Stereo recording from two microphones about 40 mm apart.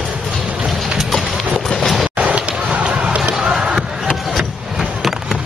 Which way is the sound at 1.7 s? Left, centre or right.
Centre.